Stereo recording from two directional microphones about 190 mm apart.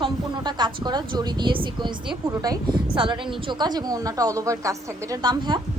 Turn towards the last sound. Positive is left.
turn(degrees=-20)  # may be behind; listen again after turning